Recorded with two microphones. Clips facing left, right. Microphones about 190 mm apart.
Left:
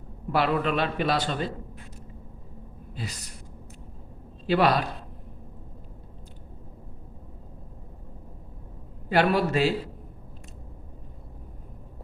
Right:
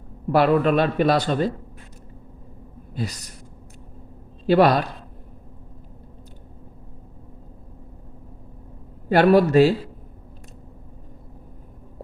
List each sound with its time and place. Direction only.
0.3 s a man's voice: 45° right (ahead or behind)
4.4 s a man's voice: 45° right (ahead or behind)
9.0 s a man's voice: 45° right (ahead or behind)